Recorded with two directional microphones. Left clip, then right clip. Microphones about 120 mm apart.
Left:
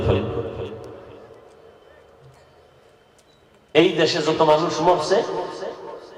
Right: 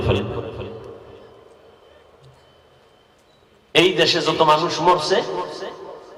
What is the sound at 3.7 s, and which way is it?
A man's voice, 40° right (ahead or behind).